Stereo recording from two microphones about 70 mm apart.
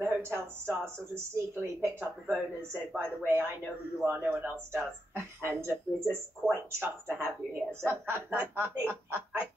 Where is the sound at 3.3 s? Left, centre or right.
Right.